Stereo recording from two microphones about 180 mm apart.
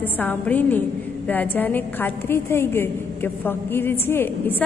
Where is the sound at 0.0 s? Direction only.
10° left (ahead or behind).